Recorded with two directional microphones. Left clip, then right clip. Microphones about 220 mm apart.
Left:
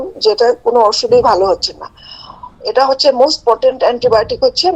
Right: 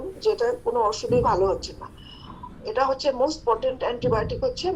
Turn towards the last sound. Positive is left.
turn(degrees=55)  # may be behind; listen again after turning